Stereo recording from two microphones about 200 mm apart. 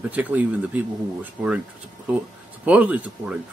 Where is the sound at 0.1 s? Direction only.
10° right (ahead or behind).